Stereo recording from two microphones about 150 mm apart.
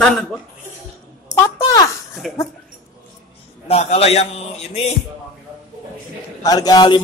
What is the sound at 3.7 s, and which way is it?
A man's voice, 45° left (ahead or behind).